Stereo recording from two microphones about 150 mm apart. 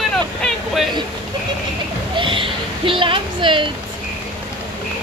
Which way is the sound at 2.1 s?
35° right (ahead or behind).